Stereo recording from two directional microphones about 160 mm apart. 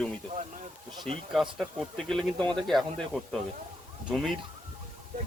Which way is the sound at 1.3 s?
Centre (ahead or behind).